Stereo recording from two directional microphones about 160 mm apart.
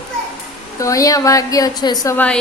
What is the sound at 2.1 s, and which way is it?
Speech, 10° left (ahead or behind).